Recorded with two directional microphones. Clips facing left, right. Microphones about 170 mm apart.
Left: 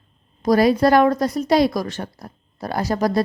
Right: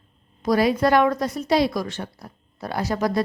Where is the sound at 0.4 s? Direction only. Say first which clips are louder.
Left 4 dB; 40° left (ahead or behind).